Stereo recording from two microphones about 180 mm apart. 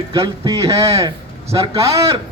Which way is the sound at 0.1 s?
20° right (ahead or behind).